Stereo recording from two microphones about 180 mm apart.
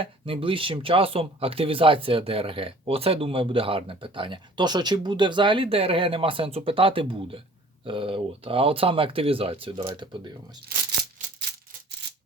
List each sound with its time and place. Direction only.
0.0 s speech: 30° right (ahead or behind)